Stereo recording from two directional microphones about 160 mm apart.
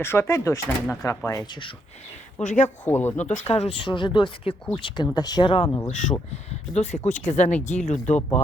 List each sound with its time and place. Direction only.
0.0 s speech: 15° left (ahead or behind)
2.4 s speech: 50° left (ahead or behind)
2.6 s speech: 10° left (ahead or behind)
3.2 s speech: 45° left (ahead or behind); by 6.2 s 25° left (ahead or behind)
6.3 s speech: 45° left (ahead or behind)